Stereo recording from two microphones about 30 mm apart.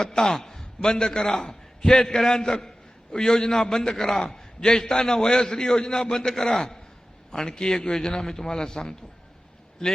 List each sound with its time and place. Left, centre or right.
0.1 s a man's voice: left
0.3 s a sound: centre
0.8 s a man's voice: left
2.3 s a man's voice: left